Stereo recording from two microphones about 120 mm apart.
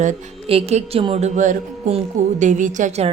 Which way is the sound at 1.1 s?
80° right.